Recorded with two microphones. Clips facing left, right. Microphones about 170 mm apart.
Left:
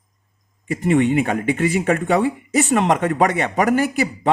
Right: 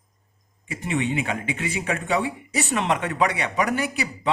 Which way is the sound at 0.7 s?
50° left (ahead or behind).